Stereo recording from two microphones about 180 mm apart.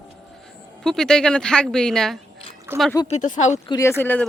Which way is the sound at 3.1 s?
40° left (ahead or behind).